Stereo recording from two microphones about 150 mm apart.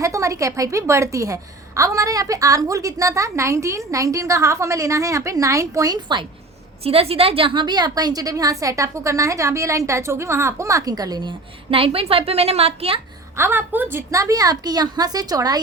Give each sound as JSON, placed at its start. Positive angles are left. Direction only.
{"t": 0.0, "sound": "a woman's voice", "side_deg": -20}
{"t": 6.8, "sound": "a woman's voice", "side_deg": -40}
{"t": 13.3, "sound": "a woman's voice", "side_deg": -15}